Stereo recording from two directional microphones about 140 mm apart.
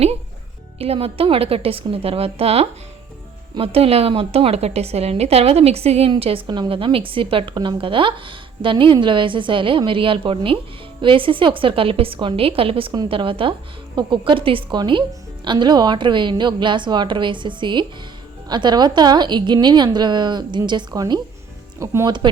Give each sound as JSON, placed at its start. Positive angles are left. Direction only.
{"t": 0.8, "sound": "a woman's voice", "side_deg": -45}